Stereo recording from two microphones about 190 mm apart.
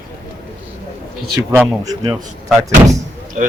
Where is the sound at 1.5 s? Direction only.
15° right (ahead or behind).